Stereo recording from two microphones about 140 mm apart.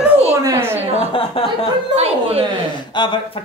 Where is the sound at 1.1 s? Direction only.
40° left (ahead or behind).